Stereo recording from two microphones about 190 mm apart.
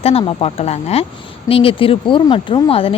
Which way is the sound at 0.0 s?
30° left (ahead or behind).